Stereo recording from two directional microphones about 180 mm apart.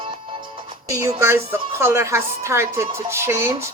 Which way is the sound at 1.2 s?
15° right (ahead or behind).